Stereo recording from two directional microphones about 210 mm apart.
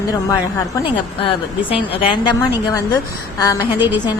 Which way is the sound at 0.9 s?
25° left (ahead or behind).